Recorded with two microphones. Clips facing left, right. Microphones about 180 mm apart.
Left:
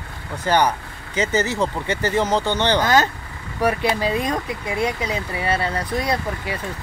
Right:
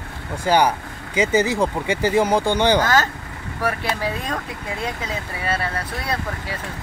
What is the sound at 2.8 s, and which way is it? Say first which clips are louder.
Speech: left 1 dB; 20° left (ahead or behind).